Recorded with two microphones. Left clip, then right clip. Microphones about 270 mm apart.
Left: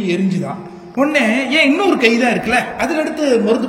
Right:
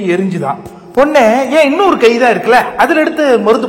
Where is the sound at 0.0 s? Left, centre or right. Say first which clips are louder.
Right 5 dB; centre.